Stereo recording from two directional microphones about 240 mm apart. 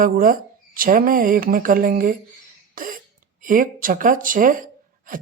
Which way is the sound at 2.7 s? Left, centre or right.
Right.